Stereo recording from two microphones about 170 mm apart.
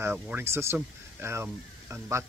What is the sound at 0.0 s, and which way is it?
Speech, 10° right (ahead or behind).